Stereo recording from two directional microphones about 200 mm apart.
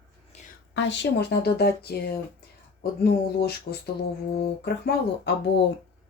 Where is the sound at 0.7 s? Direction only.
65° left (ahead or behind).